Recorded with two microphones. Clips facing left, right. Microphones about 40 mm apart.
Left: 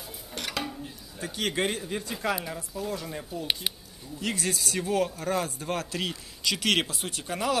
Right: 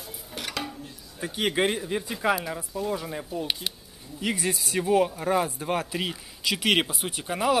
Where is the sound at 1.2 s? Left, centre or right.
Centre.